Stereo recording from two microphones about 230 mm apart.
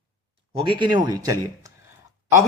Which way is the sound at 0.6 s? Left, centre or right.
Right.